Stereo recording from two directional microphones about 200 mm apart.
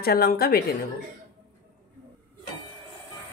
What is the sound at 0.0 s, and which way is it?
Speech, 50° left (ahead or behind).